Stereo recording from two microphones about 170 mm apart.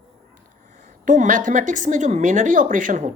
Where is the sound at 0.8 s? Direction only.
45° right (ahead or behind).